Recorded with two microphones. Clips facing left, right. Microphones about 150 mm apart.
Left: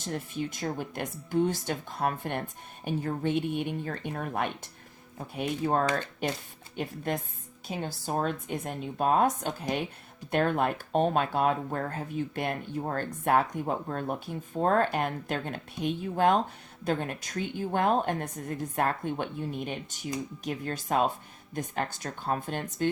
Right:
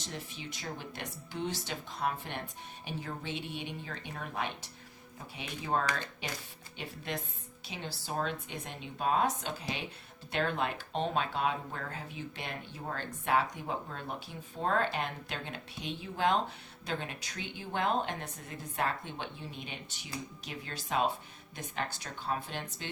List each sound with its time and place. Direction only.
0.0 s speech: 50° left (ahead or behind)